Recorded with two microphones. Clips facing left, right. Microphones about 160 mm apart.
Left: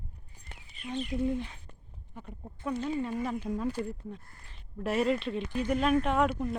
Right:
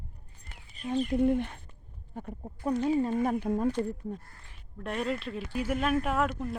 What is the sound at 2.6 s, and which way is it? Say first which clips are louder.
Speech: right 5 dB; 35° right (ahead or behind).